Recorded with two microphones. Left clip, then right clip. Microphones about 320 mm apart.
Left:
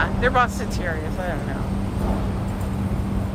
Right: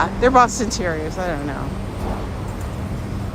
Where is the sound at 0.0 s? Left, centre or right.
Centre.